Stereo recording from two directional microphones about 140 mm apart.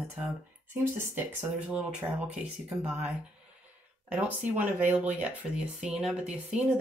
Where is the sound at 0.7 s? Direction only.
15° right (ahead or behind).